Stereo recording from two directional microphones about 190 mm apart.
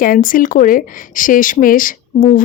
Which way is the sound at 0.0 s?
45° left (ahead or behind).